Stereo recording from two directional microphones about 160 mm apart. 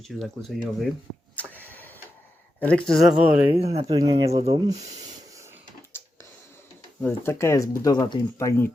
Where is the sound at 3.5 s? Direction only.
40° right (ahead or behind).